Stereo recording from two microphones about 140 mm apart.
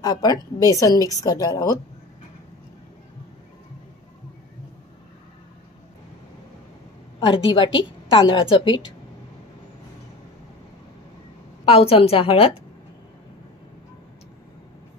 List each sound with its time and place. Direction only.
0.0 s a woman's voice: 25° left (ahead or behind)
7.2 s a woman's voice: 40° left (ahead or behind)
11.6 s a woman's voice: 45° left (ahead or behind)